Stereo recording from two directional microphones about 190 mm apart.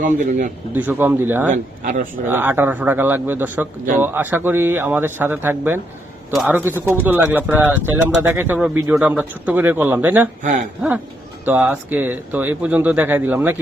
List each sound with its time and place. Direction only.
0.0 s speech: 45° right (ahead or behind)
0.7 s a man's voice: 10° right (ahead or behind)
1.5 s speech: 45° right (ahead or behind)
2.2 s a man's voice: 10° right (ahead or behind)
11.4 s a man's voice: 10° right (ahead or behind)